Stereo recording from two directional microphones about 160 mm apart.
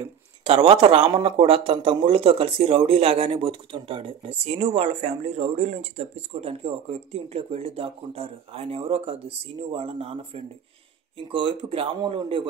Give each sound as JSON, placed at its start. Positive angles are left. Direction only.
{"t": 0.0, "sound": "speech", "side_deg": -35}